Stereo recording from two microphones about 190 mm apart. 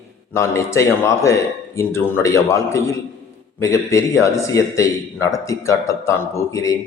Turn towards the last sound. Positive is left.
turn(degrees=15)  # may be behind; listen again after turning